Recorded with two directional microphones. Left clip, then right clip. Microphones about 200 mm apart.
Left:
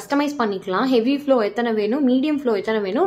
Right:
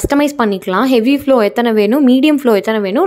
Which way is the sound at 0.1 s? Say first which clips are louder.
Right 6 dB; 45° right (ahead or behind).